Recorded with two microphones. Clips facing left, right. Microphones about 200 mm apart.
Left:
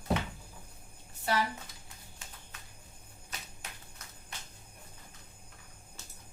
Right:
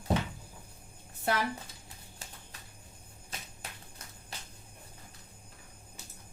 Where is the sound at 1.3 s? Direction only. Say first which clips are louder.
Even; 50° right (ahead or behind).